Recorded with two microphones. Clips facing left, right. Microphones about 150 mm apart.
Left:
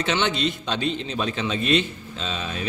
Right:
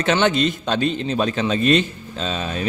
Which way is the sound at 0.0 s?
50° right (ahead or behind).